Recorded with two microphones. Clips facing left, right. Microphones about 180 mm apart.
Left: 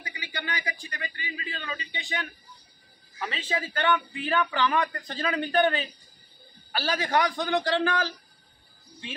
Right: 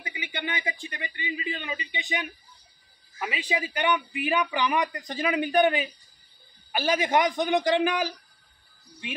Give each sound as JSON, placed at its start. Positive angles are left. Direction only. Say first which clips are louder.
{"t": 0.0, "sound": "a man's voice", "louder": "right 3 dB", "side_deg": -20}